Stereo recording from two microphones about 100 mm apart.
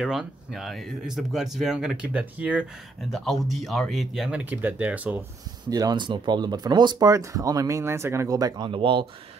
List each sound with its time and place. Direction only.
0.0 s speech: 5° right (ahead or behind)
2.1 s speech: 15° right (ahead or behind)
3.1 s speech: centre (ahead or behind)
4.3 s speech: 15° right (ahead or behind)
5.7 s speech: 40° right (ahead or behind)
7.1 s speech: 35° right (ahead or behind)
8.6 s speech: 55° right (ahead or behind)